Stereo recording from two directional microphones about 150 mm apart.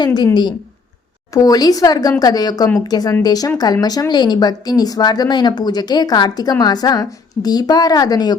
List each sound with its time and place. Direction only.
0.0 s speech: 30° left (ahead or behind)
1.3 s speech: 25° left (ahead or behind)